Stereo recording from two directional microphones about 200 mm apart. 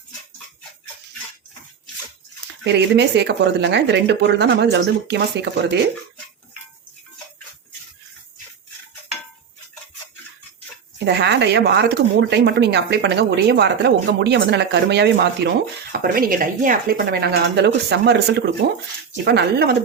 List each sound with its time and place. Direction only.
2.6 s a woman's voice: 60° right (ahead or behind)
11.0 s a woman's voice: 60° right (ahead or behind)
15.9 s a woman's voice: 45° right (ahead or behind)